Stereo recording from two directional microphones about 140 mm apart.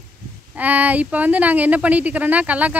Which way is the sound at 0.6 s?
10° right (ahead or behind).